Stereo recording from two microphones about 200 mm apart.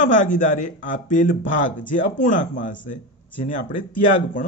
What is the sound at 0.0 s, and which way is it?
Speech, 40° left (ahead or behind).